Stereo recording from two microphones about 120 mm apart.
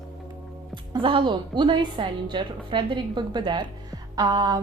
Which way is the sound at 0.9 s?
40° right (ahead or behind).